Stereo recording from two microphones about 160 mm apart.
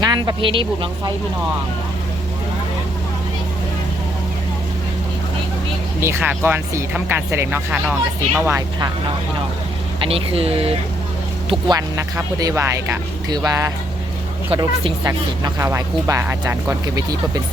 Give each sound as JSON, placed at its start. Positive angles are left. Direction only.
{"t": 0.0, "sound": "speech", "side_deg": -25}
{"t": 6.0, "sound": "speech", "side_deg": -15}
{"t": 10.1, "sound": "speech", "side_deg": -35}
{"t": 11.7, "sound": "speech", "side_deg": -20}